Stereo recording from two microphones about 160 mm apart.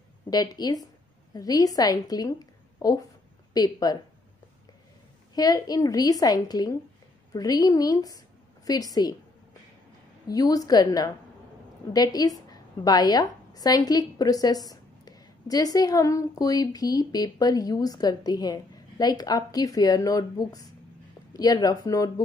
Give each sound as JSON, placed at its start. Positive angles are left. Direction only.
{"t": 0.3, "sound": "a woman's voice", "side_deg": 25}
{"t": 5.3, "sound": "a woman's voice", "side_deg": 25}
{"t": 10.2, "sound": "a woman's voice", "side_deg": 25}